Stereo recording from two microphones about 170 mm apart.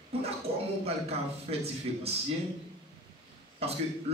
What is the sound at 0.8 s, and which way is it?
A man's voice, 35° right (ahead or behind).